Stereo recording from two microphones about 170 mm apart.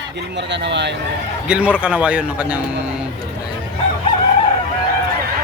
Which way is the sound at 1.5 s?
5° right (ahead or behind).